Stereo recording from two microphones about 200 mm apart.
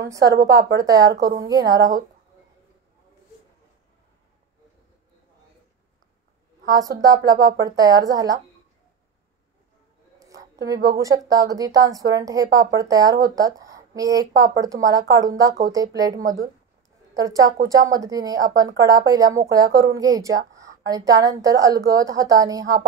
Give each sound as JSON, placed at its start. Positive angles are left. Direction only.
{"t": 0.1, "sound": "a woman's voice", "side_deg": -15}
{"t": 6.7, "sound": "a woman's voice", "side_deg": -20}
{"t": 10.1, "sound": "a woman's voice", "side_deg": -15}
{"t": 16.2, "sound": "speech", "side_deg": -40}
{"t": 17.1, "sound": "a woman's voice", "side_deg": -15}